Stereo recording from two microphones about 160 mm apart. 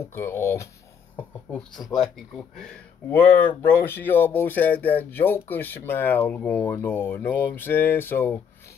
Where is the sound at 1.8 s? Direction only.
Centre (ahead or behind).